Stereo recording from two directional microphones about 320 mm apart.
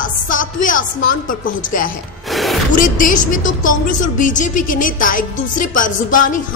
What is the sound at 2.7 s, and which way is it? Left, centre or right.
A woman's voice, left.